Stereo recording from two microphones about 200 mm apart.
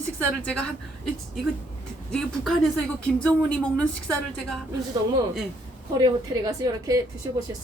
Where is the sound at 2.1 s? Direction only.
Centre (ahead or behind).